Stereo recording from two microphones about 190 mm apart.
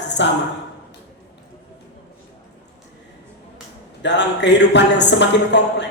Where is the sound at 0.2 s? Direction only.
70° left (ahead or behind).